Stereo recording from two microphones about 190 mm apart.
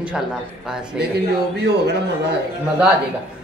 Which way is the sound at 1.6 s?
60° right (ahead or behind).